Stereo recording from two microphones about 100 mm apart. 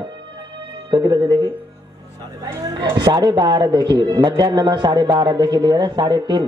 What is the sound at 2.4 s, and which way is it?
Speech, 40° right (ahead or behind).